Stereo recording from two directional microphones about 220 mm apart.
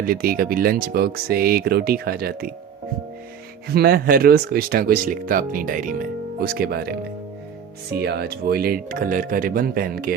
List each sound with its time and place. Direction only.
0.0 s speech: 40° right (ahead or behind)
3.7 s speech: 45° right (ahead or behind)
8.0 s speech: 45° right (ahead or behind)